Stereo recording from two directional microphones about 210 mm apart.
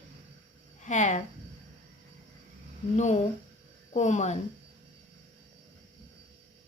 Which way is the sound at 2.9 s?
30° left (ahead or behind).